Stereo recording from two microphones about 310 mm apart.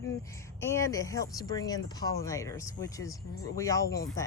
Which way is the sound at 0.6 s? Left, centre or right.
Centre.